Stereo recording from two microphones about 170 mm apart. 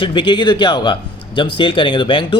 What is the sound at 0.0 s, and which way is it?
A man's voice, 30° left (ahead or behind).